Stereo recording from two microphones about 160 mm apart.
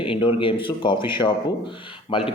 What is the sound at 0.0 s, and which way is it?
A man's voice, 35° left (ahead or behind).